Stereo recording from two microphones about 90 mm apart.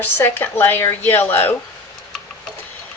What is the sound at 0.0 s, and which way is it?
Speech, 25° left (ahead or behind).